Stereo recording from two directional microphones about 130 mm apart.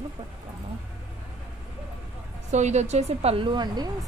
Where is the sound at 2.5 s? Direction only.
65° right (ahead or behind); by 3.9 s 35° right (ahead or behind).